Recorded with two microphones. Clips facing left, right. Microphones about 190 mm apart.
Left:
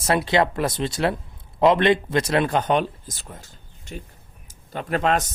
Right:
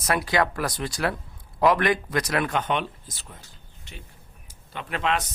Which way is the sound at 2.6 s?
40° left (ahead or behind).